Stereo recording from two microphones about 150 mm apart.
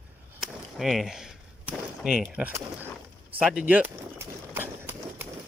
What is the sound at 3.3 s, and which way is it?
Run, 10° right (ahead or behind).